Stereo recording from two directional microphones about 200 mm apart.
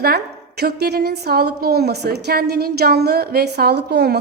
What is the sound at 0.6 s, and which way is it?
A woman's voice, 50° right (ahead or behind).